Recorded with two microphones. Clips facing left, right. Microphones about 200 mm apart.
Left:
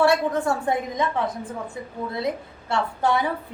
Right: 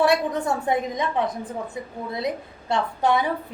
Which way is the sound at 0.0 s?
20° right (ahead or behind).